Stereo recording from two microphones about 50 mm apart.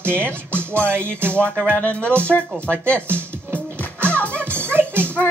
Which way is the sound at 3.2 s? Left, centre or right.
Right.